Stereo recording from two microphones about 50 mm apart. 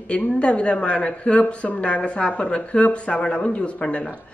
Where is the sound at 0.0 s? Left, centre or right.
Left.